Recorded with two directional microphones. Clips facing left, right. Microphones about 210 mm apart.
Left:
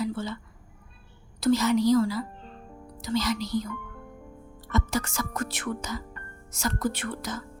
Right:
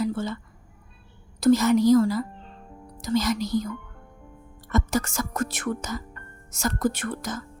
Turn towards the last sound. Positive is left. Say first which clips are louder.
# right 2 dB
turn(degrees=-45)  # may be behind; listen again after turning